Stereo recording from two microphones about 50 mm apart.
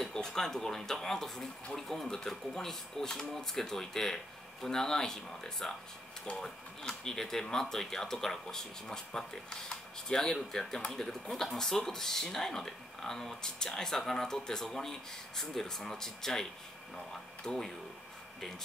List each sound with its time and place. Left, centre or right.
0.0 s speech: centre